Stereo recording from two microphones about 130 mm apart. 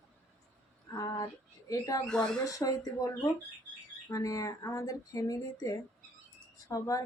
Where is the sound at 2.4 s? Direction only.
25° left (ahead or behind).